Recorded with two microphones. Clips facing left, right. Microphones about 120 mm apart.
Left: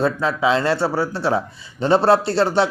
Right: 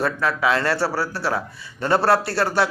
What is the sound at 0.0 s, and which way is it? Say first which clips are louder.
A man's voice: left 3 dB; 20° left (ahead or behind).